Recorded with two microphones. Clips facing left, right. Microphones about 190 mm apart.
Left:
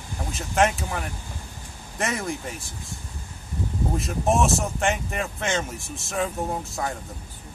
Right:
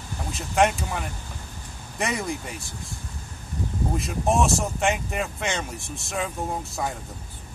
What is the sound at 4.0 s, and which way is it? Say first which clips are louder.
Speech: left 1 dB; centre (ahead or behind).